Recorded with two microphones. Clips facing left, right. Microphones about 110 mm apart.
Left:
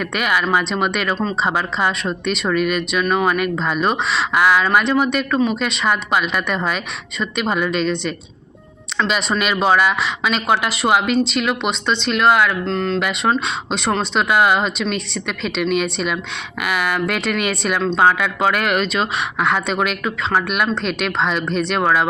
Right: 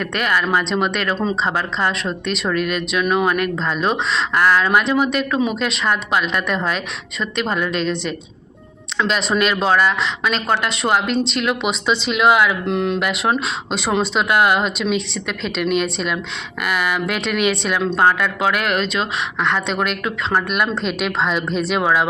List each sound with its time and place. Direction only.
0.0 s speech: 5° left (ahead or behind)
12.6 s speech: 15° right (ahead or behind)
13.0 s speech: centre (ahead or behind)